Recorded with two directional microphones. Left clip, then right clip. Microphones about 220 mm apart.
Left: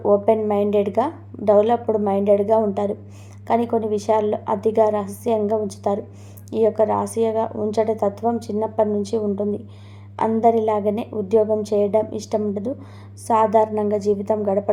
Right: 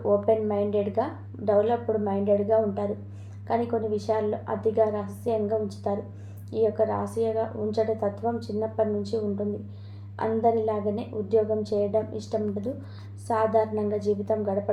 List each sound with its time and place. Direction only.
0.0 s a woman's voice: 35° left (ahead or behind)